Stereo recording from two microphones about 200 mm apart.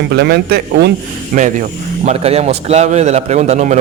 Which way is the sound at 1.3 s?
40° right (ahead or behind).